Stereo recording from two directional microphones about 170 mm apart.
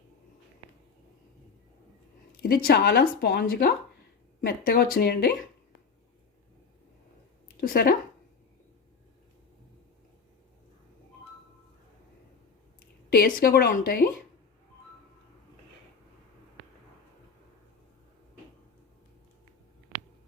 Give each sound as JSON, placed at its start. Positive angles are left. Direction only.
{"t": 2.3, "sound": "speech", "side_deg": 60}
{"t": 7.6, "sound": "speech", "side_deg": 60}
{"t": 12.8, "sound": "a woman's voice", "side_deg": 55}